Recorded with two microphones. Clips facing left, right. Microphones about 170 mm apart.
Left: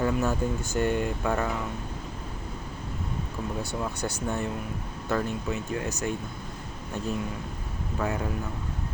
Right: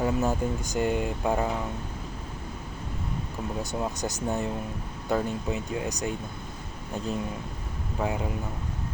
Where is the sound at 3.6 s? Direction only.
20° right (ahead or behind).